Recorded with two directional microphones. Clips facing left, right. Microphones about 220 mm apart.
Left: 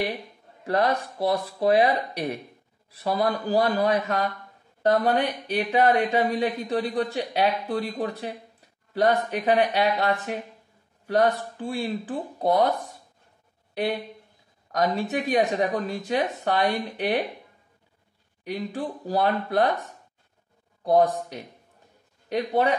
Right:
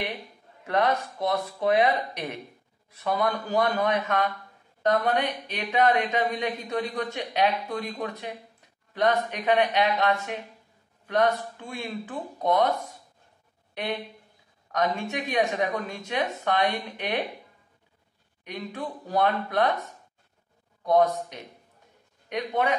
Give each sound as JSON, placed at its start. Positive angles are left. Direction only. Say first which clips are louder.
{"t": 0.7, "sound": "speech", "louder": "left 1 dB", "side_deg": 35}
{"t": 14.7, "sound": "speech", "louder": "left 3 dB", "side_deg": 35}
{"t": 18.4, "sound": "speech", "louder": "left 4 dB", "side_deg": 30}
{"t": 20.8, "sound": "speech", "louder": "left 1 dB", "side_deg": 35}